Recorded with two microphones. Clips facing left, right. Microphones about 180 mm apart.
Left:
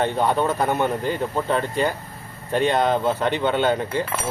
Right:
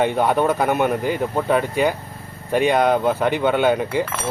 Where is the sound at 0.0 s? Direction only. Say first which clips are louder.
Right 3 dB; 15° right (ahead or behind).